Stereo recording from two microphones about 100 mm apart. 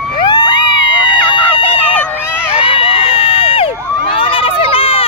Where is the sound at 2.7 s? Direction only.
65° left (ahead or behind).